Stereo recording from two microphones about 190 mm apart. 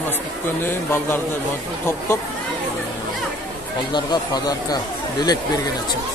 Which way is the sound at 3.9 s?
20° left (ahead or behind).